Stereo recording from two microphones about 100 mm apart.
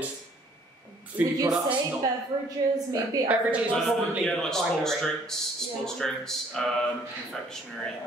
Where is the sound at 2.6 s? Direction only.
35° right (ahead or behind).